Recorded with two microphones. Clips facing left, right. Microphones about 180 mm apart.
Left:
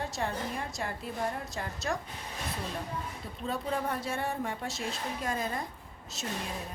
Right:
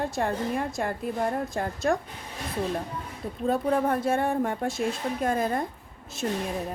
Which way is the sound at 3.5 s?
55° right (ahead or behind).